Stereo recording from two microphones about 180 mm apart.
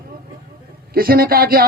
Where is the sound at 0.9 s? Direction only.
55° right (ahead or behind).